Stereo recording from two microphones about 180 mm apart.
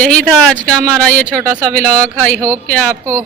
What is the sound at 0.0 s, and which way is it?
A woman's voice, 5° left (ahead or behind).